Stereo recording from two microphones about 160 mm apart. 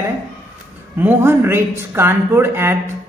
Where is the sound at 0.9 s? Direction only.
15° right (ahead or behind).